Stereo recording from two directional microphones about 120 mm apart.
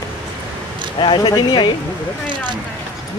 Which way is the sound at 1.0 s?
40° left (ahead or behind).